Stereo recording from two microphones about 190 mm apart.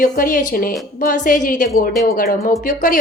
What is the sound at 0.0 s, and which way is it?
Speech, 45° left (ahead or behind).